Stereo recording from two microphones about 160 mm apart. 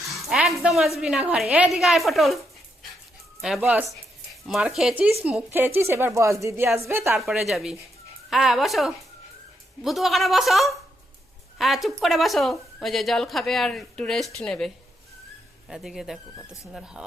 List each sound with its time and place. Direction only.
0.1 s a woman's voice: centre (ahead or behind)
3.4 s a woman's voice: 5° right (ahead or behind)
7.2 s speech: centre (ahead or behind)
15.7 s speech: 5° right (ahead or behind)